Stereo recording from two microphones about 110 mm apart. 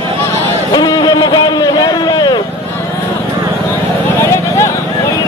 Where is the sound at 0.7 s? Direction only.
40° left (ahead or behind).